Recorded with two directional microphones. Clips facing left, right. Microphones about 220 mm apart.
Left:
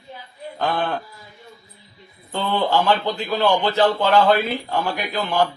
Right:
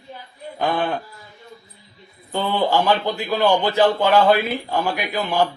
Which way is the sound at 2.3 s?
10° right (ahead or behind).